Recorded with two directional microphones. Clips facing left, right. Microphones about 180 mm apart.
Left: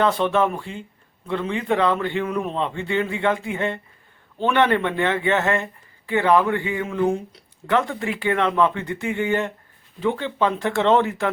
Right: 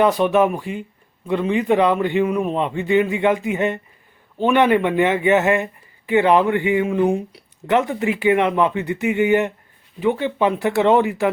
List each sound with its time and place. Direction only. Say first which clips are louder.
0.0 s speech: right 4 dB; 15° right (ahead or behind)